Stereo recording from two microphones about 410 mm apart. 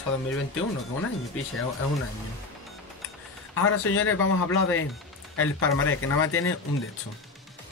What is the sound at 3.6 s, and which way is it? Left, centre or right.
Speech, left.